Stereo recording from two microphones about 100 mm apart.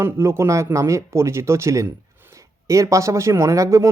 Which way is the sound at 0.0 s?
25° right (ahead or behind).